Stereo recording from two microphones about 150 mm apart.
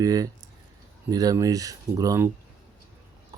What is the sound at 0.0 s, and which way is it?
Speech, 25° right (ahead or behind).